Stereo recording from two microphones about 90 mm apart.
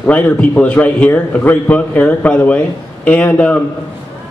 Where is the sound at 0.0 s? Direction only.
20° left (ahead or behind).